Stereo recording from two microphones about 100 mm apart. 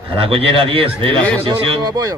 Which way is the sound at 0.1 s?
65° right (ahead or behind).